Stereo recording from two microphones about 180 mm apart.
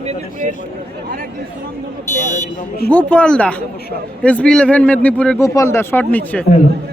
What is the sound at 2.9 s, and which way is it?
A man's voice, 10° left (ahead or behind).